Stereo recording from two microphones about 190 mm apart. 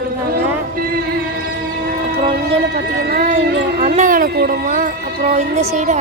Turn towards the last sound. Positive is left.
turn(degrees=-40)  # may be behind; listen again after turning